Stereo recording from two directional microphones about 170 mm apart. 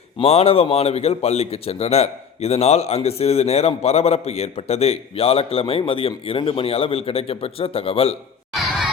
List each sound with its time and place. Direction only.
0.2 s a man's voice: 35° left (ahead or behind)